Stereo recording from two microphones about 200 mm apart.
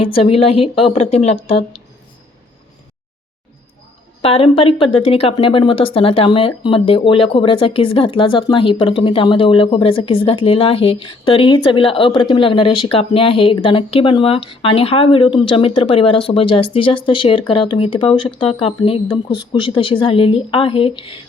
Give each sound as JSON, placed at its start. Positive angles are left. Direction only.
{"t": 0.0, "sound": "speech", "side_deg": 30}
{"t": 4.2, "sound": "speech", "side_deg": 25}